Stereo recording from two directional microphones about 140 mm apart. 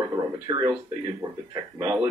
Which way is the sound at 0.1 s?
25° right (ahead or behind).